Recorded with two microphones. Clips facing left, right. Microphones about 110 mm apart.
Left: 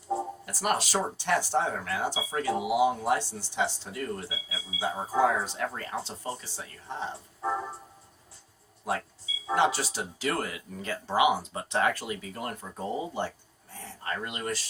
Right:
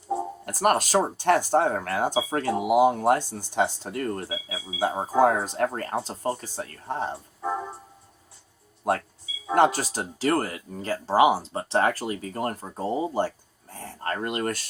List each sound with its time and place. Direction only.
0.4 s speech: 50° right (ahead or behind)
8.9 s speech: 55° right (ahead or behind)